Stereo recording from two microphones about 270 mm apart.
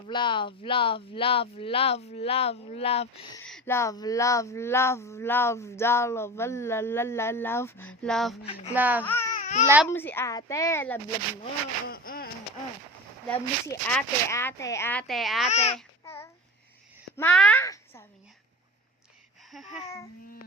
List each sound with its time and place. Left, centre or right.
0.1 s speech: centre
3.4 s a sound: centre
8.7 s speech: centre
9.0 s a sound: centre
9.3 s babbling: left
9.8 s a sound: centre
11.9 s speech: left
13.2 s speech: centre
15.4 s speech: left
16.0 s babbling: centre
17.2 s a child's voice: centre
19.5 s babbling: centre